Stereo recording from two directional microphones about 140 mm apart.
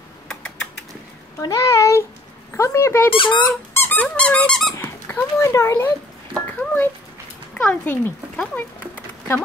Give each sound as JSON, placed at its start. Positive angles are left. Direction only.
{"t": 0.3, "sound": "typing", "side_deg": 5}
{"t": 1.4, "sound": "a child's voice", "side_deg": 25}
{"t": 3.1, "sound": "speech", "side_deg": 40}
{"t": 3.4, "sound": "dog", "side_deg": 15}
{"t": 4.7, "sound": "a child's voice", "side_deg": 15}